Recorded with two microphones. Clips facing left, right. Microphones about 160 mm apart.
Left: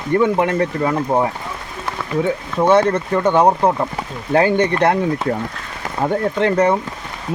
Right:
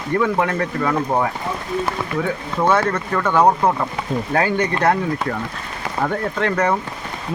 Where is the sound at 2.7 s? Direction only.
25° left (ahead or behind).